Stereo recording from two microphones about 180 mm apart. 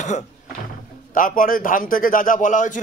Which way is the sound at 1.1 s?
50° left (ahead or behind).